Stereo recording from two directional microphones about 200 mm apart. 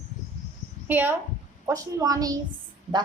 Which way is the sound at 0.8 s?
10° right (ahead or behind).